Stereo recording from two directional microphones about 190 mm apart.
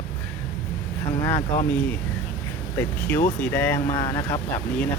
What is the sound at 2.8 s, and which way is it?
Speech, 10° left (ahead or behind).